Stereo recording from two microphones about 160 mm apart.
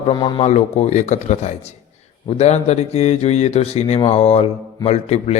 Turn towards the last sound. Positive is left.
turn(degrees=40)  # may be behind; listen again after turning